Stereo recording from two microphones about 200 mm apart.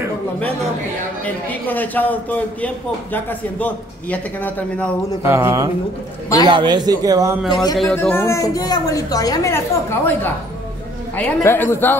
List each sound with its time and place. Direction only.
1.2 s a man's voice: 10° left (ahead or behind)
5.2 s a man's voice: 15° right (ahead or behind)
7.7 s a man's voice: 5° left (ahead or behind)